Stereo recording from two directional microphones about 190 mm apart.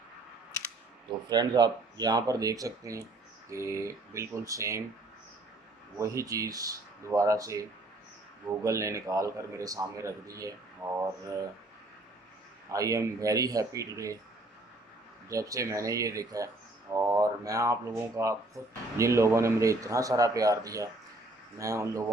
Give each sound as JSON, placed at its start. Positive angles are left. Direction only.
{"t": 1.3, "sound": "speech", "side_deg": -20}
{"t": 6.0, "sound": "speech", "side_deg": -15}
{"t": 8.6, "sound": "speech", "side_deg": -15}
{"t": 12.7, "sound": "speech", "side_deg": -15}
{"t": 15.3, "sound": "speech", "side_deg": -15}